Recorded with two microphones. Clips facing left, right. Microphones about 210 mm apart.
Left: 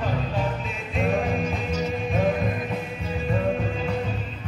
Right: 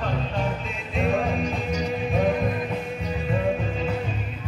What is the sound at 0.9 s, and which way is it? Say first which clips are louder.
Music: even; centre (ahead or behind).